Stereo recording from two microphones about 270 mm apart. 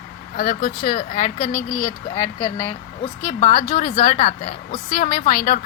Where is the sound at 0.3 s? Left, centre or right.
Left.